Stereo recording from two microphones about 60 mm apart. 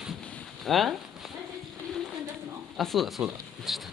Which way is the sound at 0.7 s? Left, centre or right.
Centre.